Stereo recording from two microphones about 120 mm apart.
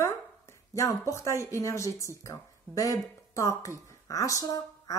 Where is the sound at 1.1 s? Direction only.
25° left (ahead or behind).